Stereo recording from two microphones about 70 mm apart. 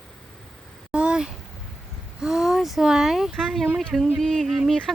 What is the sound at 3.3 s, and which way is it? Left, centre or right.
Speech, centre.